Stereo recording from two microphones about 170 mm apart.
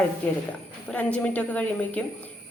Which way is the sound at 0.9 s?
10° left (ahead or behind).